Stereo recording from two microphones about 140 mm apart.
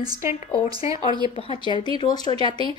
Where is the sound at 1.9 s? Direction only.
30° left (ahead or behind).